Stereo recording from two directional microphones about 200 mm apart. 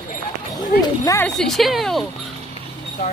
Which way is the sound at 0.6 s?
20° left (ahead or behind).